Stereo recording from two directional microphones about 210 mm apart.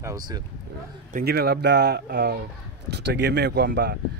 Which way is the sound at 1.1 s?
50° right (ahead or behind).